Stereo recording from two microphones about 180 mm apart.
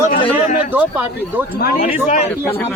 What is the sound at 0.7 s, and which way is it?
Speech, 10° right (ahead or behind).